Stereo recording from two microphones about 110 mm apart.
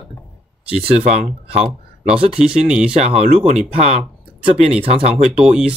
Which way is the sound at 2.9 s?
65° right (ahead or behind).